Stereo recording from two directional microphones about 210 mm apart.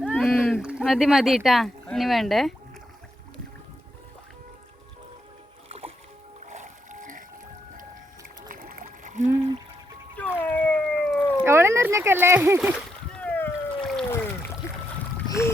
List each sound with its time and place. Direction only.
0.2 s speech: centre (ahead or behind)
5.6 s music: 30° right (ahead or behind)
6.5 s splash: 35° right (ahead or behind)
8.4 s splash: 40° right (ahead or behind)
10.3 s dog: 10° left (ahead or behind)
11.3 s speech: 10° right (ahead or behind)
12.7 s splash: 5° left (ahead or behind)
14.1 s a sound: 10° left (ahead or behind)
15.3 s speech: 15° left (ahead or behind)